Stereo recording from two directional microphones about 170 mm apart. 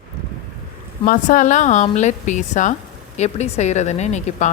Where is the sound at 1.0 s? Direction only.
50° left (ahead or behind).